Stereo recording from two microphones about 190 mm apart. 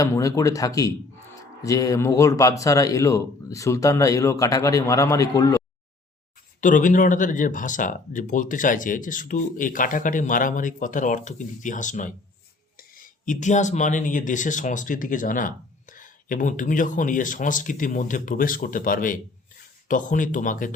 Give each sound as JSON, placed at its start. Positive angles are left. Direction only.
{"t": 0.0, "sound": "speech", "side_deg": 15}
{"t": 6.6, "sound": "speech", "side_deg": 45}